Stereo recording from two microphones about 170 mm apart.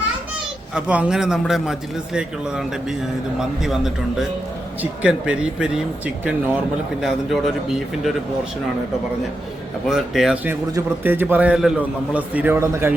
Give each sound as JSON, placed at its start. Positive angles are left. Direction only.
{"t": 0.7, "sound": "speech", "side_deg": -5}
{"t": 3.6, "sound": "speech", "side_deg": 0}
{"t": 7.0, "sound": "speech", "side_deg": 0}
{"t": 9.9, "sound": "a man's voice", "side_deg": -5}